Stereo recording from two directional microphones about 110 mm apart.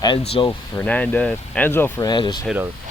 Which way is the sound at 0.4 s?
45° left (ahead or behind).